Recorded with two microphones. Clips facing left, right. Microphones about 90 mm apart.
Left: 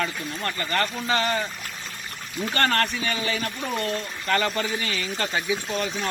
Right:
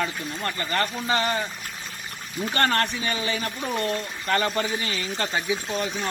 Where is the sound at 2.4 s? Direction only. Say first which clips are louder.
Even; 20° right (ahead or behind).